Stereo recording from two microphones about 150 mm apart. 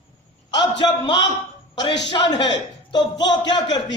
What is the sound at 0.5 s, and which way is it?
A man's voice, 30° left (ahead or behind).